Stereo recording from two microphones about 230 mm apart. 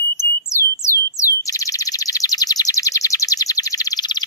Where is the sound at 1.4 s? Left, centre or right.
Centre.